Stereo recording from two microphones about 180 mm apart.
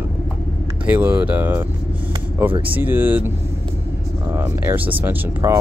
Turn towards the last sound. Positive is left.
turn(degrees=-15)  # may be behind; listen again after turning